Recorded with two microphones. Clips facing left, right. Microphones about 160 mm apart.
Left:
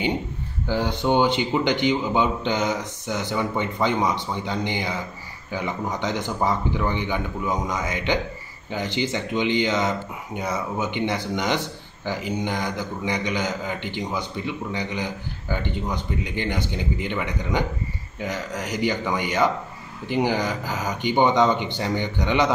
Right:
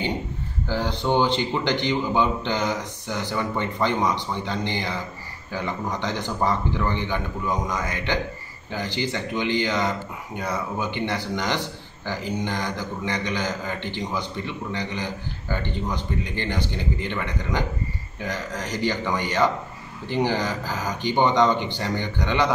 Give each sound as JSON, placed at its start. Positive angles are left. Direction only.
{"t": 0.7, "sound": "a man's voice", "side_deg": 15}